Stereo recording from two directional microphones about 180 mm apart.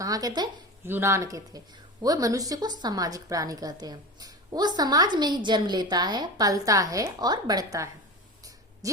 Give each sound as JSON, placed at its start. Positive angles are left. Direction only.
{"t": 0.0, "sound": "a woman's voice", "side_deg": -20}